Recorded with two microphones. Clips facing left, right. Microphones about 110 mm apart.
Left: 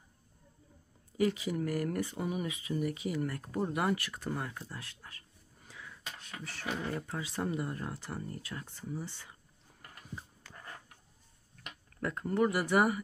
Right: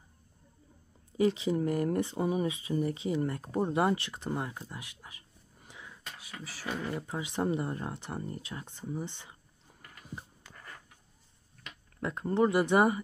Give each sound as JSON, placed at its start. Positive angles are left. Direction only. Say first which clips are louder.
{"t": 1.1, "sound": "speech", "louder": "right 4 dB", "side_deg": -25}
{"t": 5.7, "sound": "a sound", "louder": "even", "side_deg": -20}
{"t": 6.1, "sound": "beatboxing", "louder": "even", "side_deg": -5}
{"t": 7.0, "sound": "speech", "louder": "right 4 dB", "side_deg": -15}
{"t": 10.4, "sound": "a sound", "louder": "left 1 dB", "side_deg": -20}
{"t": 12.0, "sound": "speech", "louder": "right 2 dB", "side_deg": -20}